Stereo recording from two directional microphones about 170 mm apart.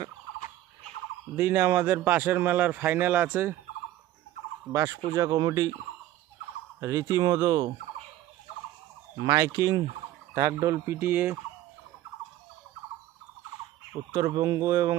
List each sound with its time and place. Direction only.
1.4 s speech: 15° right (ahead or behind)
4.7 s speech: 20° right (ahead or behind)
6.7 s speech: 15° right (ahead or behind)
9.2 s speech: 20° right (ahead or behind)
14.1 s speech: 20° right (ahead or behind)